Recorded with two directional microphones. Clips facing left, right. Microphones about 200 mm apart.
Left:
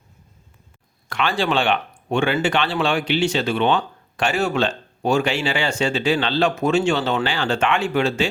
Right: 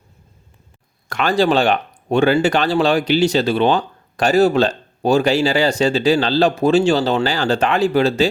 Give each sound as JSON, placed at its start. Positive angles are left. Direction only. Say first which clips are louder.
{"t": 1.1, "sound": "speech", "louder": "right 5 dB", "side_deg": -40}